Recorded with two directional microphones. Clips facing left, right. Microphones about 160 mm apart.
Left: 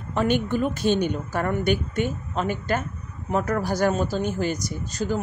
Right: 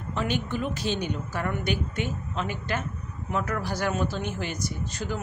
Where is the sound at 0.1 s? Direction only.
50° left (ahead or behind).